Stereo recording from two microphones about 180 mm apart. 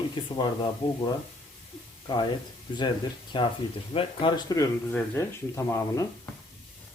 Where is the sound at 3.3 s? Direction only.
30° left (ahead or behind).